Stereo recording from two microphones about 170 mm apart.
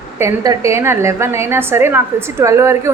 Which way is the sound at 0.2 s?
15° right (ahead or behind).